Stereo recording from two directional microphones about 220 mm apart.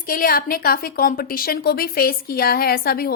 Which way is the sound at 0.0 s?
40° left (ahead or behind).